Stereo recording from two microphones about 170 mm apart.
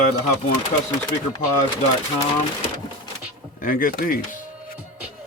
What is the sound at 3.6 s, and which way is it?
Speech, 55° left (ahead or behind).